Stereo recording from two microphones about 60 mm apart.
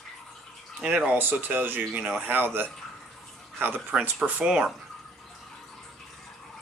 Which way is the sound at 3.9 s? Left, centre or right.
Centre.